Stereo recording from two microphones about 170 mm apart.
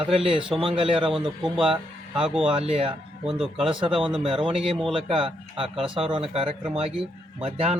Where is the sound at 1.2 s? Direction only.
Centre (ahead or behind).